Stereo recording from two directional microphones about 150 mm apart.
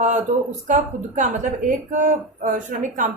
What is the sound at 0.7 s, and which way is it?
A woman's voice, 55° right (ahead or behind).